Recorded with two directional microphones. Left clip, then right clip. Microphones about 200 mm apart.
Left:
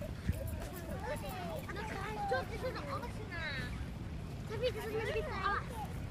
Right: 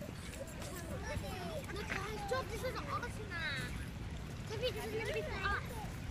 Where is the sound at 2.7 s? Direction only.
55° right (ahead or behind).